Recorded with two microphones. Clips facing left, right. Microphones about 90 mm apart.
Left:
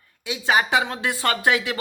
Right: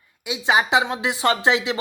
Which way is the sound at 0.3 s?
15° right (ahead or behind).